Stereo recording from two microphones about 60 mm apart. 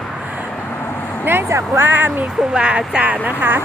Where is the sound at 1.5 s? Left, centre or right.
Right.